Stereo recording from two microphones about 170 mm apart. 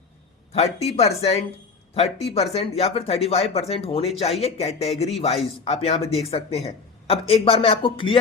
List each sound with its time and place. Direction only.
0.5 s speech: 40° left (ahead or behind)